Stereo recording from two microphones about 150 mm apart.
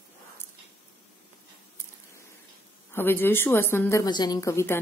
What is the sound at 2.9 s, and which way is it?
Speech, 15° left (ahead or behind).